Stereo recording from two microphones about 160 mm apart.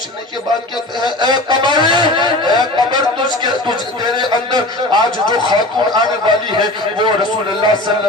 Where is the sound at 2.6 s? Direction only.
25° left (ahead or behind).